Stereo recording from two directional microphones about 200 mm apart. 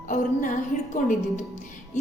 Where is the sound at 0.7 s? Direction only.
40° left (ahead or behind).